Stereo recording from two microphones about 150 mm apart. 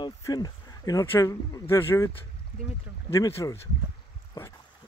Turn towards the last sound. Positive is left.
turn(degrees=30)  # may be behind; listen again after turning